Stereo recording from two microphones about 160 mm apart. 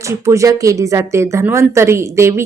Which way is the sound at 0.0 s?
20° right (ahead or behind).